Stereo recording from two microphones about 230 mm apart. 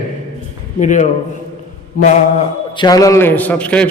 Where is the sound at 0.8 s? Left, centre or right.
Left.